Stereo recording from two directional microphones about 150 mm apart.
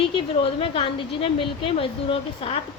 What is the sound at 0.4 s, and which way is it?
Speech, 35° left (ahead or behind).